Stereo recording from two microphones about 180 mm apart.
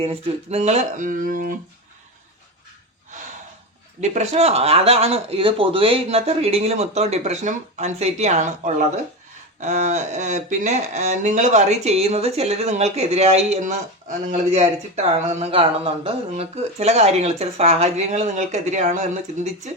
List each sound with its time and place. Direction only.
0.0 s speech: 35° right (ahead or behind); by 1.5 s 50° right (ahead or behind)
4.0 s speech: 40° right (ahead or behind)